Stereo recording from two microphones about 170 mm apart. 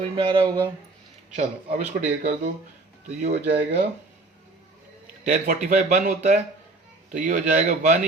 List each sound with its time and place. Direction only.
0.0 s speech: 25° right (ahead or behind)
1.4 s speech: 45° right (ahead or behind)
3.4 s speech: 85° right
5.2 s speech: 45° right (ahead or behind)